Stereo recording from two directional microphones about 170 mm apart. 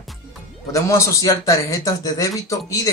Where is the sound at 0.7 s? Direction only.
15° left (ahead or behind).